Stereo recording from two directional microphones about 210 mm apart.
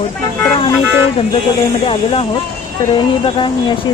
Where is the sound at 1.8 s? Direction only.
25° left (ahead or behind).